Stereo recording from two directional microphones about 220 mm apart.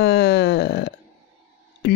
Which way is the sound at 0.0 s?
50° left (ahead or behind).